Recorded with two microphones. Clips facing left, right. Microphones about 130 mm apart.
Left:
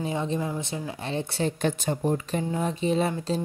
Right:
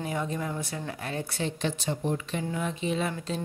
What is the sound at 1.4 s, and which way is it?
A woman's voice, 45° left (ahead or behind).